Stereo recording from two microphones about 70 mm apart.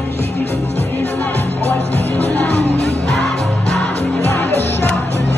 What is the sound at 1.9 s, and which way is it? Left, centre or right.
Music, left.